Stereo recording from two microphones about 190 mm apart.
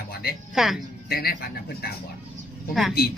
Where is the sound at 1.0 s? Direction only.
55° left (ahead or behind).